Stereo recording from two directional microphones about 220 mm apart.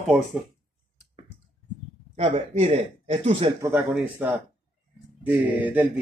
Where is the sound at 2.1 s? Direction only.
30° right (ahead or behind).